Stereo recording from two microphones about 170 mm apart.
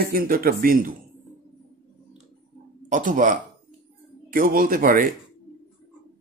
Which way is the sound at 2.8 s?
50° right (ahead or behind).